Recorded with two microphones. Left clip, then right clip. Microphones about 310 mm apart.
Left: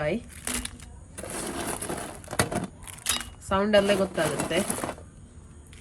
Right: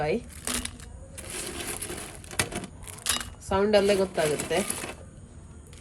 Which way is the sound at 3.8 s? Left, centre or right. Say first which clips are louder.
Even; centre.